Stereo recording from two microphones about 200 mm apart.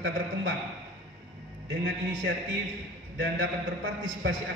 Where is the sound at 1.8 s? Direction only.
70° right (ahead or behind).